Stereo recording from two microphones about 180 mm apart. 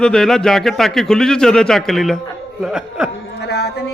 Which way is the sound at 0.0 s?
5° left (ahead or behind).